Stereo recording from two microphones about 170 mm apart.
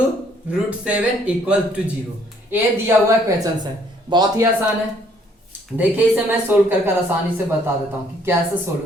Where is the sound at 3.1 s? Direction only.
20° right (ahead or behind).